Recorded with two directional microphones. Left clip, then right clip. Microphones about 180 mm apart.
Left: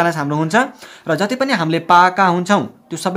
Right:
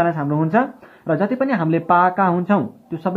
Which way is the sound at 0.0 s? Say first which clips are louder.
Left 2 dB; 30° left (ahead or behind).